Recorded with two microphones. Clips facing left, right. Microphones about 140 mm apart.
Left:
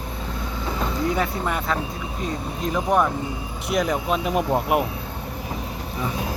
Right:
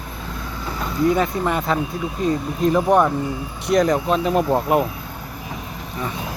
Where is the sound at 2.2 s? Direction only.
Centre (ahead or behind).